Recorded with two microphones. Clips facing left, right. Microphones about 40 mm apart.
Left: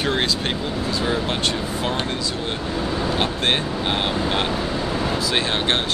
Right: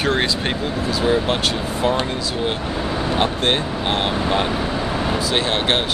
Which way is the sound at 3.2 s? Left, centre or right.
Centre.